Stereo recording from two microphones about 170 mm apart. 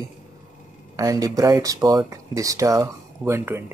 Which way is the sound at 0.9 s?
20° right (ahead or behind).